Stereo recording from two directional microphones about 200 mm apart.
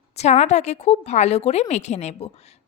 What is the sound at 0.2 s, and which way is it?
A woman's voice, 35° left (ahead or behind).